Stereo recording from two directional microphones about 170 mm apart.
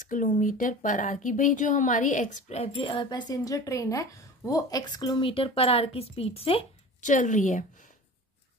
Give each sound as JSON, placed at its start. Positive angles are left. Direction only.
{"t": 0.0, "sound": "speech", "side_deg": 50}